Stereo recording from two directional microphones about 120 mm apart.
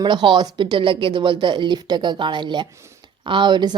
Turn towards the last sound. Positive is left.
turn(degrees=-35)  # may be behind; listen again after turning